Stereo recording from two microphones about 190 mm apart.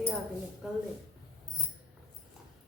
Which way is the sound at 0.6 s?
Centre (ahead or behind).